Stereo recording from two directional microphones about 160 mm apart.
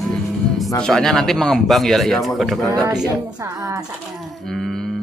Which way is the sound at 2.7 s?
25° right (ahead or behind).